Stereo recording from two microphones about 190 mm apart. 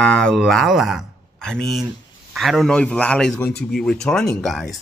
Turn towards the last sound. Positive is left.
turn(degrees=0)  # may be behind; listen again after turning